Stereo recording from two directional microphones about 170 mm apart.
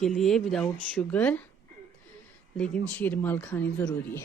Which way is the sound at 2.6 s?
5° left (ahead or behind).